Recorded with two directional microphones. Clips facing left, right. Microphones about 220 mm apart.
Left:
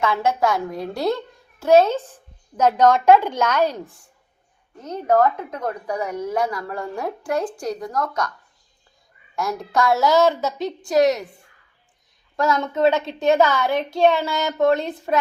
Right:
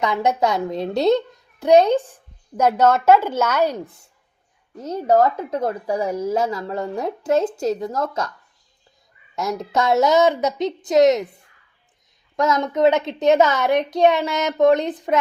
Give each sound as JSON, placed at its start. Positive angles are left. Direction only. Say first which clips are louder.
{"t": 0.0, "sound": "a child's voice", "louder": "right 1 dB", "side_deg": -15}
{"t": 5.1, "sound": "speech", "louder": "right 1 dB", "side_deg": -30}
{"t": 9.3, "sound": "speech", "louder": "right 1 dB", "side_deg": -20}
{"t": 12.4, "sound": "speech", "louder": "right 2 dB", "side_deg": -20}